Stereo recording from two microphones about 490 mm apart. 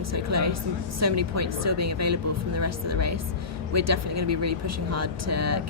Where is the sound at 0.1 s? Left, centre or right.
Right.